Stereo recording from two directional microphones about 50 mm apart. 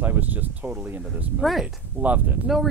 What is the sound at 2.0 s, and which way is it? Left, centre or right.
Speech, right.